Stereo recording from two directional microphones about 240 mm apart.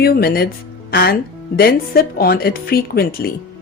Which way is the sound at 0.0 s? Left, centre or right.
Left.